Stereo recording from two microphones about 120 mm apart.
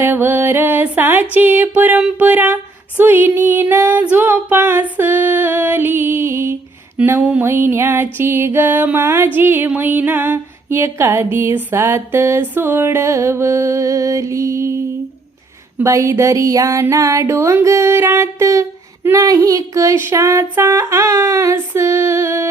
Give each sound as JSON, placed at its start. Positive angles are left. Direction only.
{"t": 0.0, "sound": "music", "side_deg": -20}
{"t": 3.0, "sound": "female singing", "side_deg": -15}
{"t": 7.0, "sound": "music", "side_deg": -20}
{"t": 15.8, "sound": "music", "side_deg": -25}